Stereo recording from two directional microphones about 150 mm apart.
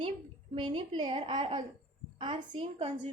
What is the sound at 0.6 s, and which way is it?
A woman's voice, 35° right (ahead or behind).